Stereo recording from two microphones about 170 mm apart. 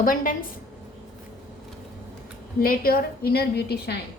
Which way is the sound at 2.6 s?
60° left (ahead or behind).